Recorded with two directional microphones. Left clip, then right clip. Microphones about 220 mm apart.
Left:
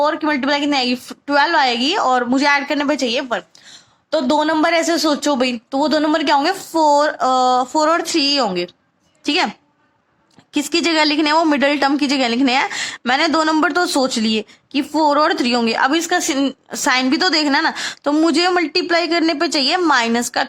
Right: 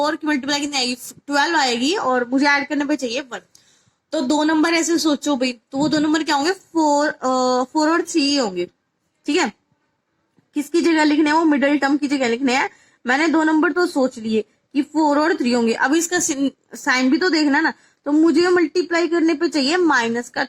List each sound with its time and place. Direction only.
0.0 s a woman's voice: 25° left (ahead or behind)
10.8 s a woman's voice: 30° left (ahead or behind)